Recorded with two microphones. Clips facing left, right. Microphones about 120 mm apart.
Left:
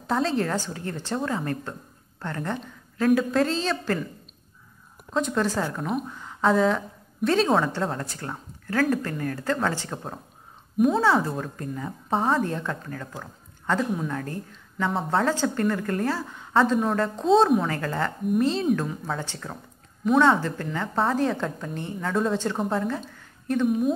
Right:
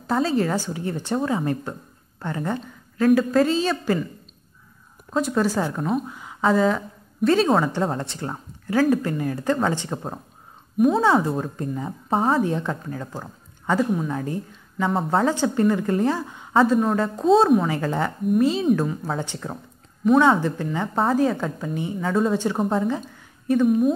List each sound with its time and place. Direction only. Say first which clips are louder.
0.0 s a woman's voice: right 3 dB; 5° right (ahead or behind)
0.7 s a woman's voice: right 4 dB; 15° right (ahead or behind)
5.1 s a woman's voice: right 3 dB; 5° right (ahead or behind)
7.7 s speech: right 4 dB; 15° right (ahead or behind)
8.6 s a woman's voice: right 4 dB; 10° right (ahead or behind)
12.1 s a woman's voice: right 3 dB; 5° right (ahead or behind)
13.7 s a woman's voice: right 4 dB; 5° right (ahead or behind)
14.9 s a woman's voice: right 3 dB; centre (ahead or behind)
15.2 s a woman's voice: right 4 dB; 15° right (ahead or behind)
16.5 s a woman's voice: right 3 dB; 5° right (ahead or behind)
17.6 s a woman's voice: right 3 dB; 15° right (ahead or behind)
20.9 s a woman's voice: right 3 dB; 5° right (ahead or behind)